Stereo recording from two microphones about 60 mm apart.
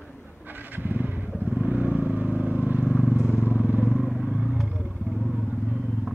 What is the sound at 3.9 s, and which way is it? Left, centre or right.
Vehicle, centre.